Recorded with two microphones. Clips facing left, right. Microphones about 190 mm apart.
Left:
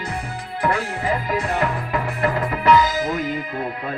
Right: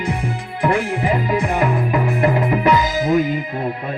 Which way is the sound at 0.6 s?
20° right (ahead or behind).